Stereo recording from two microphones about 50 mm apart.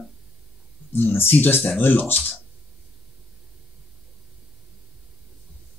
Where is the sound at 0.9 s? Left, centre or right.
Left.